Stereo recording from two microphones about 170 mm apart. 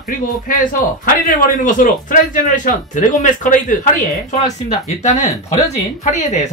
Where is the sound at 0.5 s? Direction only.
55° left (ahead or behind).